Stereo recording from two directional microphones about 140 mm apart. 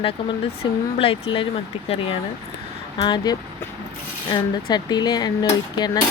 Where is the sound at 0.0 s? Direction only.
40° left (ahead or behind).